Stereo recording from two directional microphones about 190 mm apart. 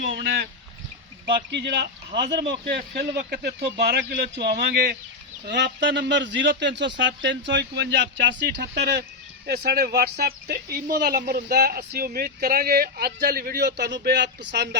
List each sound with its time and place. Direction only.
0.1 s speech: 60° right (ahead or behind)
1.5 s speech: 65° right (ahead or behind)
8.5 s speech: 60° right (ahead or behind)